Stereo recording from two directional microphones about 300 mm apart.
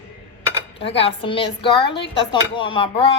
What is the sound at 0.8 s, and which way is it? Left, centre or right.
A woman's voice, centre.